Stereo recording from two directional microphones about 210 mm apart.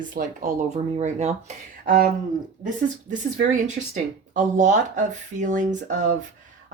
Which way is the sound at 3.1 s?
40° right (ahead or behind).